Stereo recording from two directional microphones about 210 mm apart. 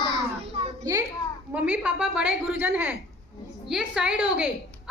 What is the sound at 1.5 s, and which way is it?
A woman's voice, 5° right (ahead or behind).